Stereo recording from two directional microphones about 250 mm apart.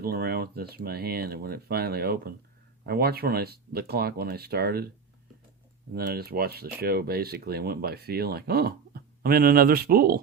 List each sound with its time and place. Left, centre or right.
0.0 s speech: right
5.9 s speech: right